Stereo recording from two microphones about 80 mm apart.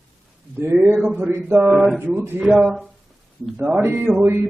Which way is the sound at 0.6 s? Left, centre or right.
Right.